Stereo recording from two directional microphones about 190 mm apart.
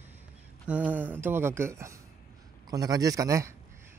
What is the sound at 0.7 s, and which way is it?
A man's voice, 5° right (ahead or behind).